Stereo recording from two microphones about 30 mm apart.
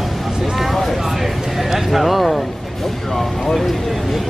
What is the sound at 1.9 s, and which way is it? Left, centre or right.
Speech, centre.